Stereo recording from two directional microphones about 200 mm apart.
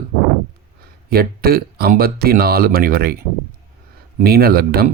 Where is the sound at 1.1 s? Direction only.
50° right (ahead or behind).